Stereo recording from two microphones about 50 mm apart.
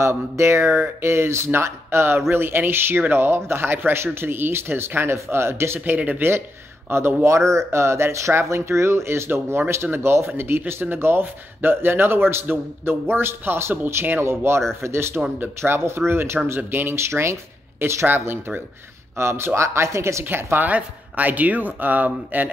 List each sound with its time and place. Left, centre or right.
0.1 s a man's voice: right
5.1 s speech: right
5.9 s speech: right
6.9 s a man's voice: right
7.2 s a man's voice: right
15.3 s a man's voice: right
17.1 s speech: right
19.1 s speech: right
20.5 s speech: right